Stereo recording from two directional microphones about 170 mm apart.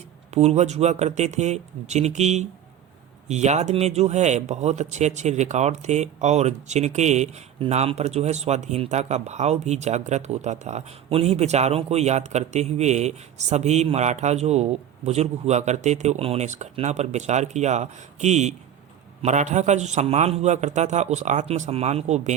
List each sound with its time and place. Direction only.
0.3 s a man's voice: 40° right (ahead or behind)